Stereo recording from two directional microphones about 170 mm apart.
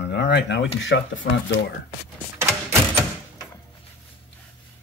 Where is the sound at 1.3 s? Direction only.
70° left (ahead or behind).